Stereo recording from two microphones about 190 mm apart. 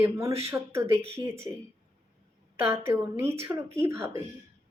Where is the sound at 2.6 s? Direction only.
10° right (ahead or behind).